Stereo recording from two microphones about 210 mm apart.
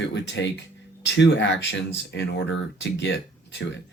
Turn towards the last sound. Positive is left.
turn(degrees=55)  # may be behind; listen again after turning